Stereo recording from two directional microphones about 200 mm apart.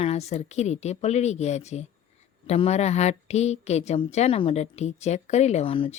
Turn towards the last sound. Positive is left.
turn(degrees=25)  # may be behind; listen again after turning